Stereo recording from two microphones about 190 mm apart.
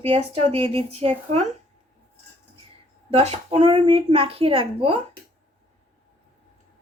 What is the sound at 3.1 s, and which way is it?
A woman's voice, 35° right (ahead or behind).